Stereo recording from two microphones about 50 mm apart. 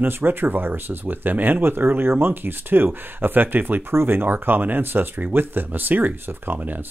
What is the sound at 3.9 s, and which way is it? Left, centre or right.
Speech, right.